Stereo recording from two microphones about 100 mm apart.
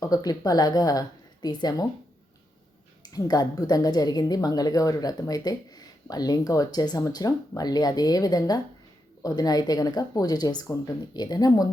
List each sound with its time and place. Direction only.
0.0 s a woman's voice: 40° left (ahead or behind)
3.0 s a woman's voice: 40° left (ahead or behind)